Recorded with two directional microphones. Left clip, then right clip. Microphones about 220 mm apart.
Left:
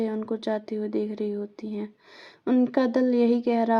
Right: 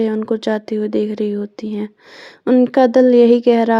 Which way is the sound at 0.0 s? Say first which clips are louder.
Right 11 dB; 40° right (ahead or behind).